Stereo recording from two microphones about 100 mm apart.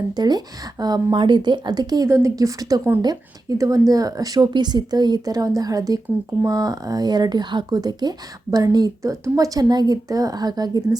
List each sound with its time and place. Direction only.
0.1 s a woman's voice: 45° right (ahead or behind)